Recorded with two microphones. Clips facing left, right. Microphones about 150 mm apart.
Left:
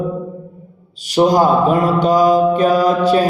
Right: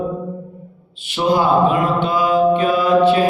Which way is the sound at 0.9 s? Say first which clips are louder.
Left 4 dB; 40° left (ahead or behind).